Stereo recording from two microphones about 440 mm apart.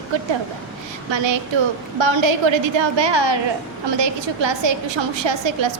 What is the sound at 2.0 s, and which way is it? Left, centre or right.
A woman's voice, right.